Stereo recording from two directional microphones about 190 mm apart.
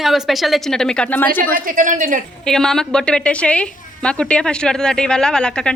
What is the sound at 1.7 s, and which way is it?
Speech, 45° right (ahead or behind).